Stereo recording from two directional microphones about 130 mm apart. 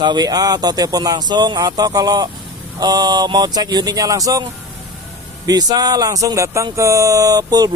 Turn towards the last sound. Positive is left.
turn(degrees=-30)  # may be behind; listen again after turning